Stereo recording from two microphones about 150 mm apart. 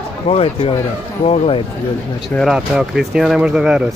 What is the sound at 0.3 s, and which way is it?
Speech, 40° left (ahead or behind).